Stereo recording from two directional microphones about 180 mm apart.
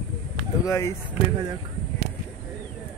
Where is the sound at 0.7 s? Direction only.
15° left (ahead or behind).